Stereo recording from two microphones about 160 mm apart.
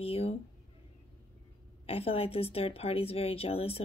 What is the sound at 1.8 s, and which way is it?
A woman's voice, 35° left (ahead or behind).